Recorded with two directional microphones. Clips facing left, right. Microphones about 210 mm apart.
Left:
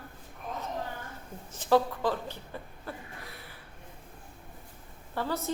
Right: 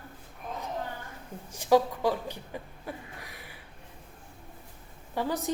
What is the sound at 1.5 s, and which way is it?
Chuckle, 10° right (ahead or behind).